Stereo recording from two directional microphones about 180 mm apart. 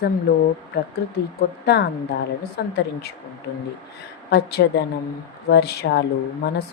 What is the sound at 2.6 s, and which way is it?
Speech, 60° left (ahead or behind).